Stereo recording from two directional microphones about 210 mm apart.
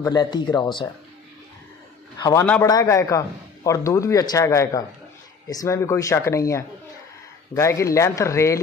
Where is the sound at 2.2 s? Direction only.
15° left (ahead or behind).